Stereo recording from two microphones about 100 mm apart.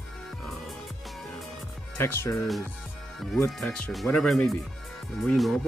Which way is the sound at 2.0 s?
25° left (ahead or behind).